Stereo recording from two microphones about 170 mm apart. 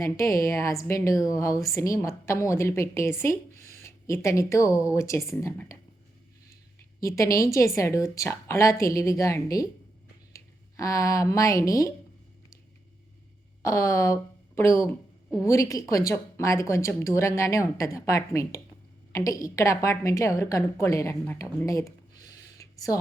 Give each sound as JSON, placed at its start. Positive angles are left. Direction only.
{"t": 0.0, "sound": "a woman's voice", "side_deg": 20}
{"t": 6.7, "sound": "a woman's voice", "side_deg": 15}
{"t": 13.6, "sound": "a woman's voice", "side_deg": 20}